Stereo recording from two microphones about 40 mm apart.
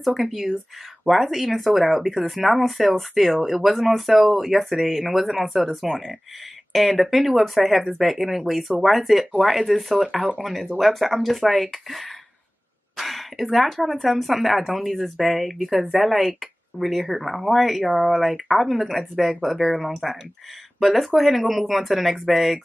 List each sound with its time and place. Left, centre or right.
0.2 s speech: centre
9.9 s speech: right
10.8 s speech: centre
12.9 s throat clearing: centre
14.1 s speech: centre